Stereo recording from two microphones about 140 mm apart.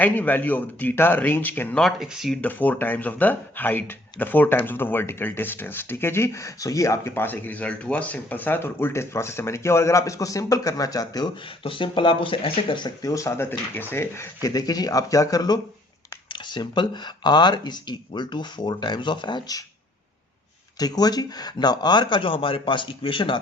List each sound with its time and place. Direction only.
0.0 s speech: 10° left (ahead or behind)
1.8 s speech: centre (ahead or behind)
2.4 s speech: 10° left (ahead or behind); by 19.6 s 30° left (ahead or behind)
20.7 s speech: 30° left (ahead or behind)